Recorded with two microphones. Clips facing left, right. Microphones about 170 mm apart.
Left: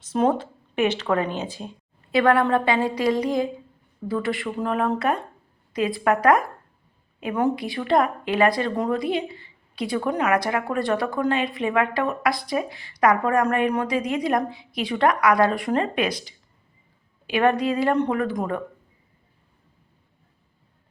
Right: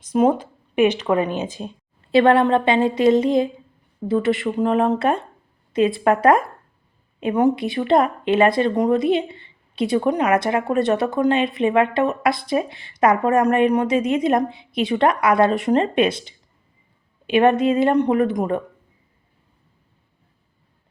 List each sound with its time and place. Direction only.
0.0 s speech: 10° right (ahead or behind)